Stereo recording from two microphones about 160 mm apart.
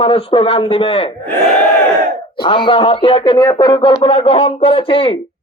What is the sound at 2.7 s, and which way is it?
Speech, 30° left (ahead or behind).